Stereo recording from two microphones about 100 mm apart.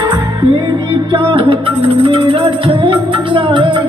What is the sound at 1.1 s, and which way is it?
Music, 60° right (ahead or behind).